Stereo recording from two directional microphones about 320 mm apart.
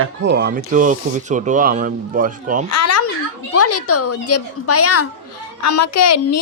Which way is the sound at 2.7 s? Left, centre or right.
Left.